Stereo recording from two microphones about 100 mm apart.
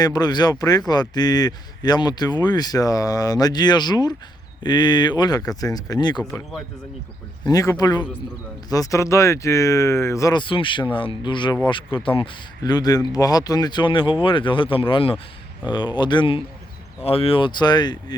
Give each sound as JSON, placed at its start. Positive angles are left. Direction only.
{"t": 0.0, "sound": "speech", "side_deg": 40}
{"t": 7.4, "sound": "speech", "side_deg": 40}
{"t": 10.3, "sound": "speech", "side_deg": 55}
{"t": 12.6, "sound": "speech", "side_deg": 45}
{"t": 15.6, "sound": "speech", "side_deg": 50}
{"t": 17.0, "sound": "speech", "side_deg": 75}